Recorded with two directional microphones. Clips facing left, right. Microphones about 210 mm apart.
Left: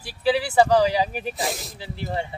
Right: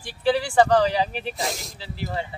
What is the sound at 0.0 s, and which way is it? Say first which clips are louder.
Speech: even; 5° left (ahead or behind).